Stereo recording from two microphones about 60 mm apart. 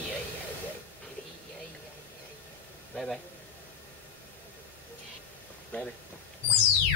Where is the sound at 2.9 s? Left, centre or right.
Centre.